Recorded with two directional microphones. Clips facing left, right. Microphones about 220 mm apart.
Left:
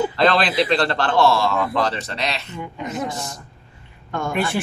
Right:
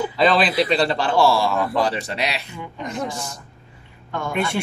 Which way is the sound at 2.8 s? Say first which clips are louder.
Even; 5° left (ahead or behind).